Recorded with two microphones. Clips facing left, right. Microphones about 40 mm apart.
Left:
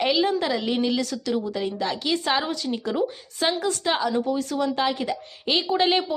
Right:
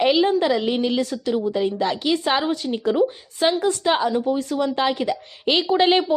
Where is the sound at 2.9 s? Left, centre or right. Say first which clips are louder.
Right 5 dB; centre.